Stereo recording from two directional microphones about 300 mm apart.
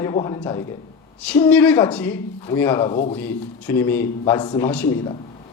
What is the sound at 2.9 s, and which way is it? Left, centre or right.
Speech, left.